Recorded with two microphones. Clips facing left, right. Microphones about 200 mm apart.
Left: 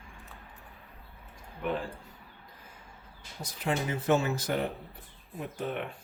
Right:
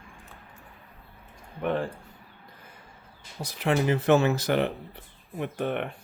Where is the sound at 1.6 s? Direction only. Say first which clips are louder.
Right 5 dB; 60° right (ahead or behind).